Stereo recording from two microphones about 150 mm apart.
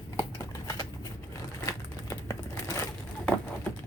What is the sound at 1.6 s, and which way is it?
Crumpling, 20° left (ahead or behind).